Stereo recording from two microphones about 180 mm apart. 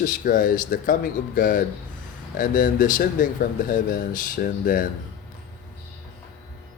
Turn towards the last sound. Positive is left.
turn(degrees=50)  # may be behind; listen again after turning